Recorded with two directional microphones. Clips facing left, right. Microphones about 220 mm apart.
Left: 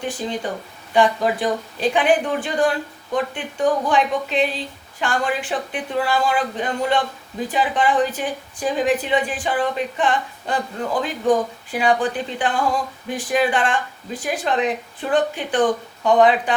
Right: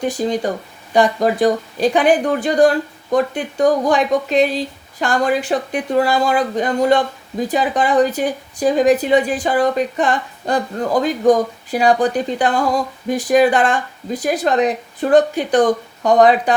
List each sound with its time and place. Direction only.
0.2 s speech: 40° right (ahead or behind)